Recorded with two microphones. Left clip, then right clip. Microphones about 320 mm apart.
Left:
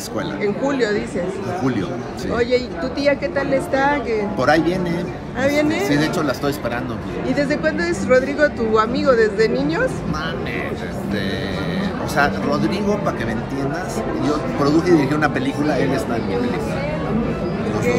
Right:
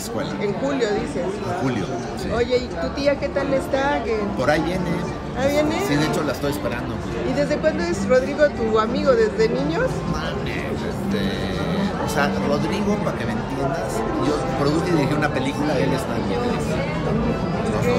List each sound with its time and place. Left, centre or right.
0.4 s speech: left
2.3 s speech: left
4.4 s a man's voice: centre
5.4 s speech: left
5.9 s a man's voice: centre
7.3 s speech: left
12.2 s a man's voice: centre
14.6 s a man's voice: centre